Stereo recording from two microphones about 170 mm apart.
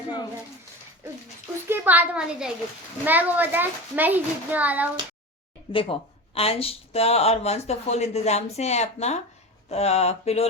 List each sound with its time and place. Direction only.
1.6 s a child's voice: 10° right (ahead or behind)
5.7 s a woman's voice: 30° left (ahead or behind)